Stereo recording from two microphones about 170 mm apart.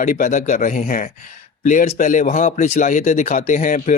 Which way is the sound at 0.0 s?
50° left (ahead or behind).